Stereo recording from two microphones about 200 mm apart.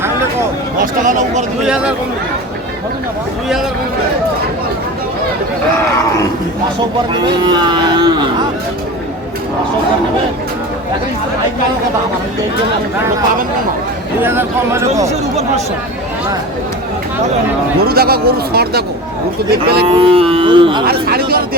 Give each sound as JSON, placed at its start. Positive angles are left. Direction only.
{"t": 0.8, "sound": "speech", "side_deg": -40}
{"t": 1.6, "sound": "speech", "side_deg": -5}
{"t": 7.1, "sound": "speech", "side_deg": -20}
{"t": 14.2, "sound": "speech", "side_deg": -10}
{"t": 17.8, "sound": "speech", "side_deg": -50}
{"t": 19.8, "sound": "speech", "side_deg": -25}
{"t": 20.8, "sound": "speech", "side_deg": -50}